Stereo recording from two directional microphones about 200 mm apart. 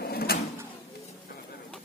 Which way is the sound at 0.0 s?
50° left (ahead or behind).